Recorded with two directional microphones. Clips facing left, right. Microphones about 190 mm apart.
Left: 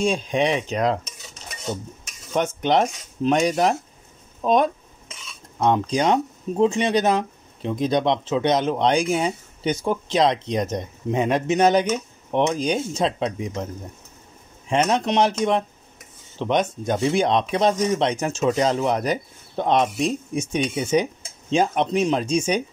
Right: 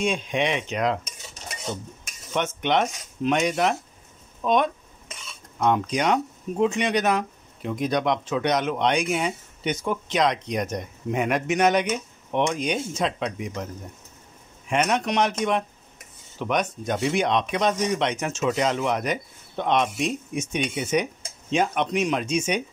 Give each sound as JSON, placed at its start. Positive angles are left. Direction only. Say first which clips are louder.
{"t": 0.0, "sound": "speech", "louder": "left 3 dB", "side_deg": 35}
{"t": 2.3, "sound": "speech", "louder": "left 3 dB", "side_deg": 35}
{"t": 14.7, "sound": "speech", "louder": "left 3 dB", "side_deg": 30}